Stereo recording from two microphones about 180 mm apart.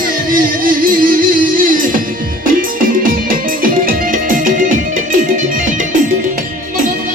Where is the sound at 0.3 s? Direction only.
50° right (ahead or behind).